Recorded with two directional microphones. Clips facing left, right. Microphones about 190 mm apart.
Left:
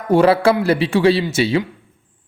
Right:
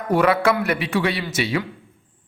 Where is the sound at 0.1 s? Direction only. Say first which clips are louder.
Left 5 dB; 30° left (ahead or behind).